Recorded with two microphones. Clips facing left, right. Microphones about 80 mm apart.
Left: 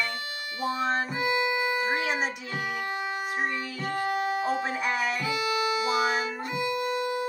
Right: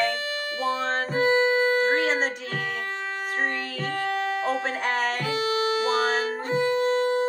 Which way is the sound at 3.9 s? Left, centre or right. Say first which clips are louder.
Even; right.